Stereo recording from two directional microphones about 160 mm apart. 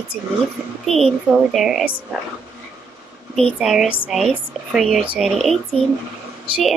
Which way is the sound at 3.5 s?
5° right (ahead or behind).